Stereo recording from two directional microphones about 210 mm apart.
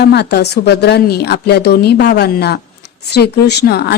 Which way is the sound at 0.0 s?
50° left (ahead or behind).